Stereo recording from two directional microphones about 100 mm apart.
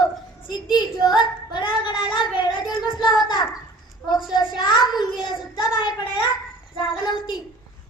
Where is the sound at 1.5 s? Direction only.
55° left (ahead or behind).